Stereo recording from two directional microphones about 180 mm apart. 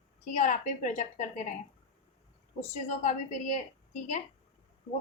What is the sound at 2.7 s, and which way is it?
Speech, 40° left (ahead or behind).